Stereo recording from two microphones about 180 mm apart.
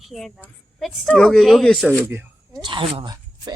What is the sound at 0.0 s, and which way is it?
A woman's voice, centre (ahead or behind).